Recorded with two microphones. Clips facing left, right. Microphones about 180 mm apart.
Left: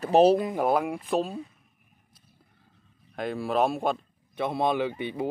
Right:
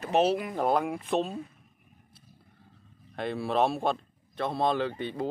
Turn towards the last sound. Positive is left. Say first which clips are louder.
# left 2 dB
turn(degrees=10)  # may be behind; listen again after turning